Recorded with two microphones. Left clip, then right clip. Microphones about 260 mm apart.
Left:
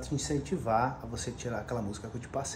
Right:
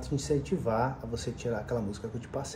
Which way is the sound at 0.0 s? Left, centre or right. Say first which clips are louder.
Right 3 dB; centre.